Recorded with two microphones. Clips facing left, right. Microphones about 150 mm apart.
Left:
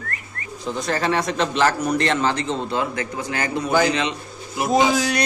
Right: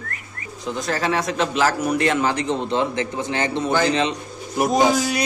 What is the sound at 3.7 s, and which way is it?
Speech, 10° left (ahead or behind).